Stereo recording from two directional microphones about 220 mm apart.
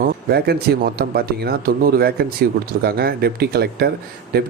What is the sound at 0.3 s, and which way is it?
Speech, 45° right (ahead or behind).